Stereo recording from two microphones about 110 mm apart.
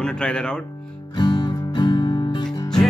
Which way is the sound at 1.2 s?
45° left (ahead or behind).